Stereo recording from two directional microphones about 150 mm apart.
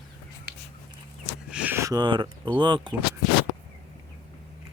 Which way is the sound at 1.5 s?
10° right (ahead or behind).